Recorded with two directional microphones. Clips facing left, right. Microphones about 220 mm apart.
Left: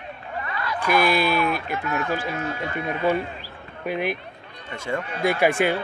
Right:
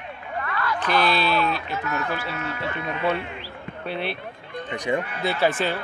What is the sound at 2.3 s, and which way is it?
Speech, 30° left (ahead or behind).